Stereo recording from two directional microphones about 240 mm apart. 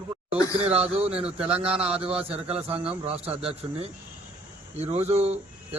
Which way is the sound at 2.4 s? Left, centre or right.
Right.